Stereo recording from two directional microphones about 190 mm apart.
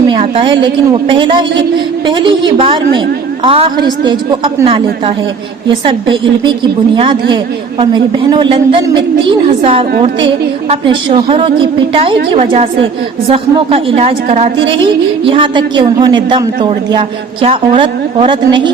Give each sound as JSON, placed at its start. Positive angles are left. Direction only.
{"t": 0.1, "sound": "a woman's voice", "side_deg": -30}
{"t": 10.8, "sound": "a woman's voice", "side_deg": -30}